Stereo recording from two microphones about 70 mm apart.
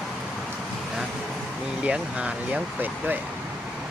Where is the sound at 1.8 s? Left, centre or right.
Centre.